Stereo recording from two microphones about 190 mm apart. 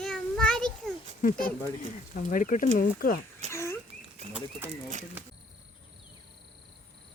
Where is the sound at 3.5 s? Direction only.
15° left (ahead or behind).